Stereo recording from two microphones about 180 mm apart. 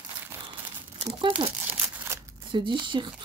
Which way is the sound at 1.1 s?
25° right (ahead or behind).